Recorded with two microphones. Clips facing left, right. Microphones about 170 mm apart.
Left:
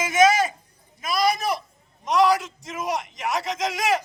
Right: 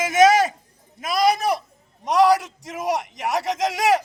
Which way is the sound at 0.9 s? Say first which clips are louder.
Right 3 dB; 70° right (ahead or behind).